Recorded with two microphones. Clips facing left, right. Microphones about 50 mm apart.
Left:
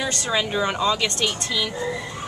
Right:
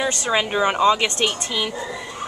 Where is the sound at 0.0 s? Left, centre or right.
Right.